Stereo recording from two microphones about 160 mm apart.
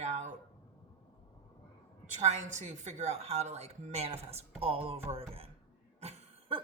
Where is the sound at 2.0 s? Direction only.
45° right (ahead or behind).